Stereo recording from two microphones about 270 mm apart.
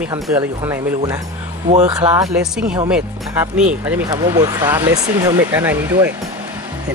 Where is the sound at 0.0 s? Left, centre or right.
Centre.